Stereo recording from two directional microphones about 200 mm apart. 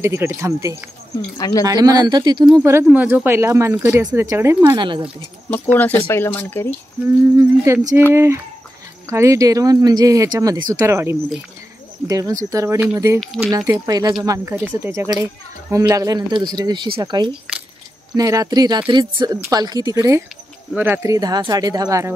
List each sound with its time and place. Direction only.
0.0 s speech: 15° right (ahead or behind)
1.4 s speech: 15° left (ahead or behind)
1.7 s speech: 20° right (ahead or behind)
5.5 s speech: 10° left (ahead or behind)
7.3 s speech: 15° right (ahead or behind)
13.2 s speech: centre (ahead or behind)
13.7 s speech: 20° right (ahead or behind)